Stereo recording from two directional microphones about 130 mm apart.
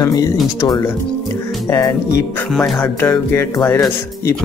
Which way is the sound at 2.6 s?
15° left (ahead or behind).